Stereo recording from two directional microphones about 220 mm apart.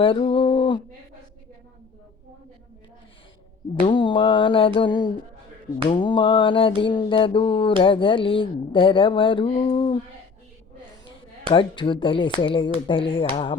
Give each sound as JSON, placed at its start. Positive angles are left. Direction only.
{"t": 0.0, "sound": "speech", "side_deg": 25}
{"t": 3.8, "sound": "speech", "side_deg": 20}
{"t": 11.5, "sound": "speech", "side_deg": 20}